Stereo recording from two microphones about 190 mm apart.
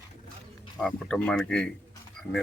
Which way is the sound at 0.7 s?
5° left (ahead or behind).